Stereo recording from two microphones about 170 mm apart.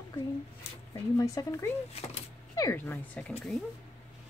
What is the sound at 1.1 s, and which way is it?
Speech, 20° left (ahead or behind).